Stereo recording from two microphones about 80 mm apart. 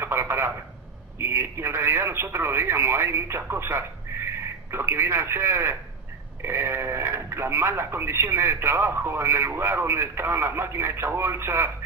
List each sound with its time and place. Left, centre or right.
0.0 s telephone: right
1.1 s speech: right